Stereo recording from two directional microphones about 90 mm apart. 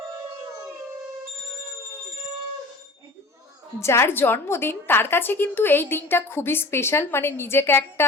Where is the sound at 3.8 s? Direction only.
30° left (ahead or behind).